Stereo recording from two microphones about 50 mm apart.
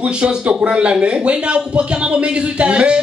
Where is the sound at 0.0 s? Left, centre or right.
Centre.